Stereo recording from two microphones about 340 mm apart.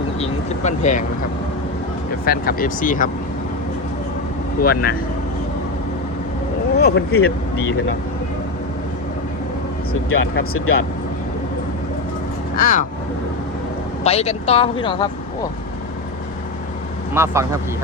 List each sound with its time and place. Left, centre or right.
0.2 s speech: left
2.2 s speech: left
4.6 s speech: left
6.7 s speech: left
9.9 s speech: left
12.5 s speech: left
14.0 s speech: centre
17.2 s speech: centre